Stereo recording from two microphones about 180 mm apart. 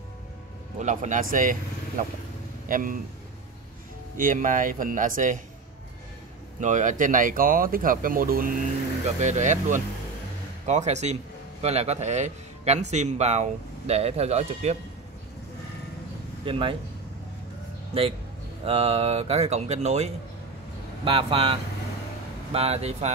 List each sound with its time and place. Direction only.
0.7 s speech: 40° right (ahead or behind)
4.2 s speech: 45° right (ahead or behind)
6.6 s speech: 45° right (ahead or behind)
9.2 s a man's voice: 40° right (ahead or behind)
16.4 s speech: 30° right (ahead or behind)
18.7 s a man's voice: 35° right (ahead or behind)